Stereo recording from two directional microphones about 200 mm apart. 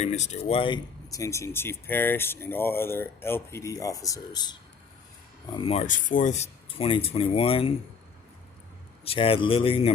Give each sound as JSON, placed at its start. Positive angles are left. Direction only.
{"t": 0.0, "sound": "speech", "side_deg": 35}
{"t": 9.0, "sound": "speech", "side_deg": 30}